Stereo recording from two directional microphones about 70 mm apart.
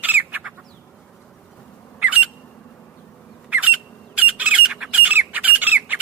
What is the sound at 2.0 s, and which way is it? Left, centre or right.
Squawk, right.